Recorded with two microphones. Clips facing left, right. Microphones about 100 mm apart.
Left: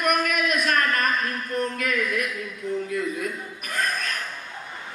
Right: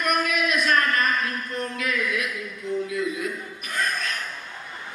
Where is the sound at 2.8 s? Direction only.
50° left (ahead or behind).